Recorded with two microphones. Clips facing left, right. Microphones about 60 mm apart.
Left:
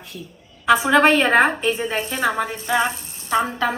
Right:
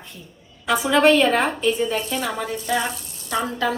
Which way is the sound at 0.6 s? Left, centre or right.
Left.